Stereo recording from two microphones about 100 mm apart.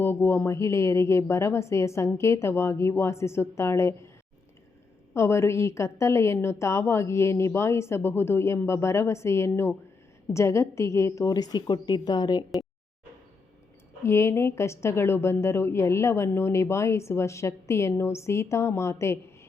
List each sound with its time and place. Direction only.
0.0 s a woman's voice: 25° left (ahead or behind)
5.1 s a woman's voice: 30° left (ahead or behind); by 12.5 s 45° left (ahead or behind)
14.0 s a woman's voice: 25° left (ahead or behind)